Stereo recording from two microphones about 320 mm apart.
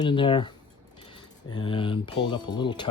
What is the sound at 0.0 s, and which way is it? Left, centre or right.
Speech, centre.